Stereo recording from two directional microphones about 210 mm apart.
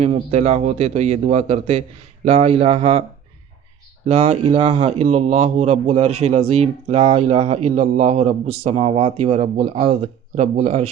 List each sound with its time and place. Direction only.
0.0 s speech: 30° right (ahead or behind)
4.0 s speech: 30° right (ahead or behind)